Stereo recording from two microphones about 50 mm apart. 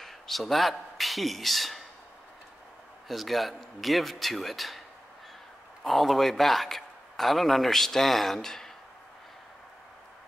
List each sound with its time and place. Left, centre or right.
0.0 s a man's voice: centre
3.1 s a man's voice: centre
5.9 s a man's voice: centre